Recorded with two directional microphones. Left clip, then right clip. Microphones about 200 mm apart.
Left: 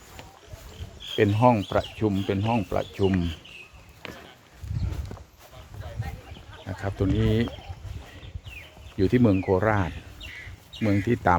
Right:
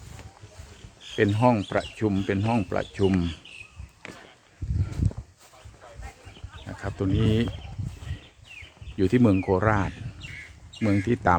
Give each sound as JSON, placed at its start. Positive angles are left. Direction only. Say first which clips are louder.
{"t": 1.1, "sound": "speech", "louder": "left 2 dB", "side_deg": -5}
{"t": 4.0, "sound": "a sound", "louder": "left 2 dB", "side_deg": -20}
{"t": 6.7, "sound": "speech", "louder": "left 1 dB", "side_deg": 0}
{"t": 9.0, "sound": "speech", "louder": "even", "side_deg": -10}